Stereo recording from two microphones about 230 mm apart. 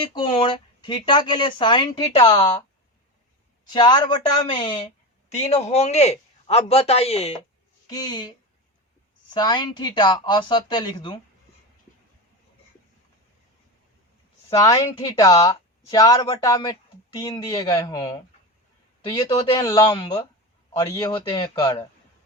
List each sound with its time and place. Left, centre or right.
0.0 s speech: left
3.7 s a woman's voice: centre
9.3 s speech: centre
14.5 s a woman's voice: centre